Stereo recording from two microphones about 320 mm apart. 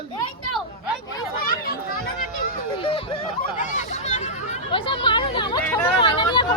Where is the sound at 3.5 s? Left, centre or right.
Left.